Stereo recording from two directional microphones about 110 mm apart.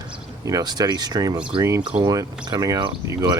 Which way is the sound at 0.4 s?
35° right (ahead or behind).